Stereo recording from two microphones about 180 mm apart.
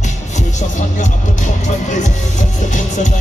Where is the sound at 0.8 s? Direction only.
45° left (ahead or behind).